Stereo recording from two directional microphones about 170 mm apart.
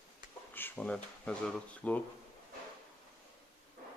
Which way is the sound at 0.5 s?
10° left (ahead or behind).